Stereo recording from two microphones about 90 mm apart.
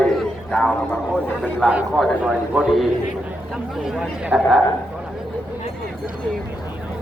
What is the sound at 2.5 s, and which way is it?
Speech, 15° right (ahead or behind).